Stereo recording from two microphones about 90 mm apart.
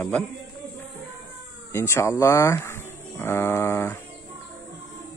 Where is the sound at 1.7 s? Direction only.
30° left (ahead or behind).